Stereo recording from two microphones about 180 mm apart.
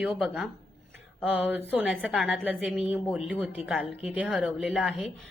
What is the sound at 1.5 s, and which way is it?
A woman's voice, 10° right (ahead or behind).